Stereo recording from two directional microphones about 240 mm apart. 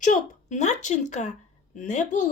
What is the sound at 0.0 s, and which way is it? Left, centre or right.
Speech, left.